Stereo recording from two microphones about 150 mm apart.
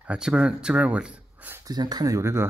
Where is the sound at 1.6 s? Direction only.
25° right (ahead or behind).